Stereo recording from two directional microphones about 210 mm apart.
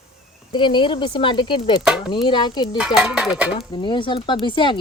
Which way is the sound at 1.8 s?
5° right (ahead or behind).